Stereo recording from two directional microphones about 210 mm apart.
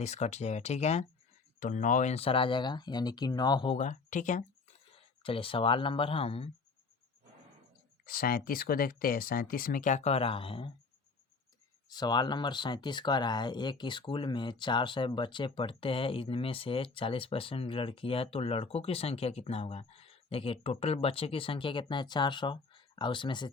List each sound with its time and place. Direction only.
0.0 s speech: 35° left (ahead or behind)
4.9 s speech: 25° left (ahead or behind)
8.0 s speech: 45° left (ahead or behind); by 10.7 s 25° left (ahead or behind)
11.9 s speech: 20° left (ahead or behind)